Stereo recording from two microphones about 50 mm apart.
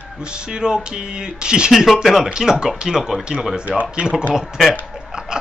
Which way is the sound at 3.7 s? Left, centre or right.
Right.